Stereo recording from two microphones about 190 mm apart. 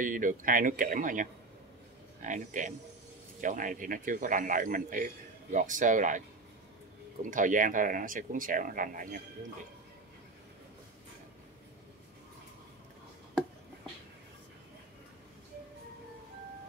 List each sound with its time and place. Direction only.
0.0 s speech: 45° right (ahead or behind)
7.2 s speech: 45° right (ahead or behind)